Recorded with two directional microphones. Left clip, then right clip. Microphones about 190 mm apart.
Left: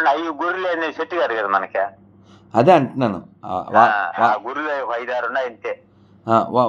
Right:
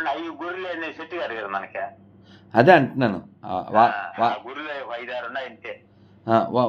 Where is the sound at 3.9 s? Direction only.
45° left (ahead or behind).